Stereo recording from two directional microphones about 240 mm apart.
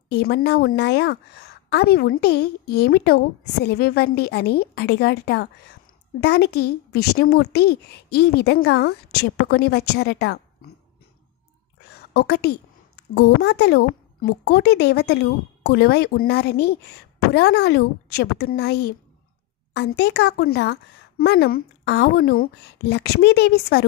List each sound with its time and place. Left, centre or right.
0.1 s a woman's voice: left
11.9 s a woman's voice: left